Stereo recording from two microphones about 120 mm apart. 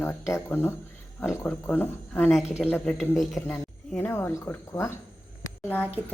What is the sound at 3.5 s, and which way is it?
Speech, 20° left (ahead or behind).